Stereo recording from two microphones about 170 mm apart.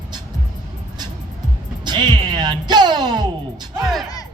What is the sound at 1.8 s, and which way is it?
Music, 25° right (ahead or behind).